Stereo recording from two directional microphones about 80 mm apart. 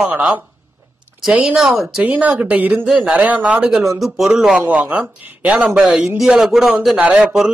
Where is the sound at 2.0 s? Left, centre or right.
Centre.